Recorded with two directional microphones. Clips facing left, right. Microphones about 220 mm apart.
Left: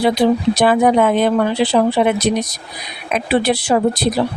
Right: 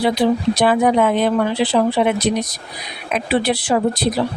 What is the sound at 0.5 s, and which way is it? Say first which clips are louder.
Speech: left 2 dB; 45° left (ahead or behind).